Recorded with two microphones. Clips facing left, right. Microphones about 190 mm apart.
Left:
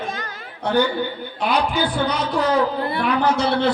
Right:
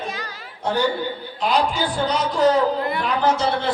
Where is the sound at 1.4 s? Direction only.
60° left (ahead or behind).